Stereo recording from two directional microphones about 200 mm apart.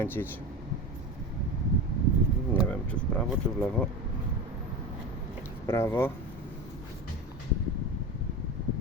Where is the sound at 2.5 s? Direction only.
5° left (ahead or behind).